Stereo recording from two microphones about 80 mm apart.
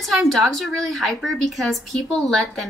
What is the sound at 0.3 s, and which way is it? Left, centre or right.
Speech, centre.